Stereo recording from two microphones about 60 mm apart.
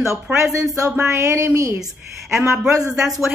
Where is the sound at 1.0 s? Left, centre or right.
Right.